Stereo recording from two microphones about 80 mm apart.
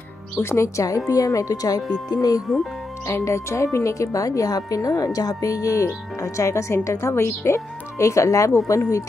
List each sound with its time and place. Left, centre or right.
0.4 s a woman's voice: left
2.4 s speech: centre
3.1 s speech: left